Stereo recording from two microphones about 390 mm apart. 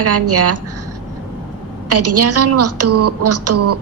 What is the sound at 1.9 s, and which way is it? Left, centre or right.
A woman's voice, right.